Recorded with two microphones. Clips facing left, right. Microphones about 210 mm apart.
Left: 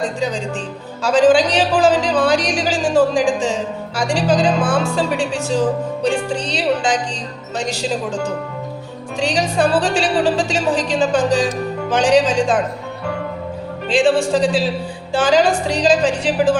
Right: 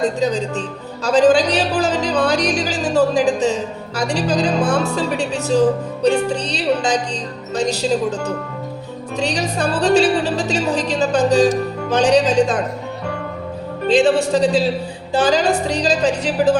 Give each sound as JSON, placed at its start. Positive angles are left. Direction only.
{"t": 0.2, "sound": "a woman's voice", "side_deg": -40}
{"t": 13.8, "sound": "a woman's voice", "side_deg": -40}